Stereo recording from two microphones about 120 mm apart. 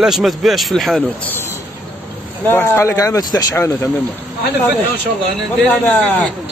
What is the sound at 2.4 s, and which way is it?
Speech, 20° left (ahead or behind).